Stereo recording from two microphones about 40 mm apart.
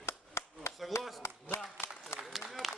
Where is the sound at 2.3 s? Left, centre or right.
Centre.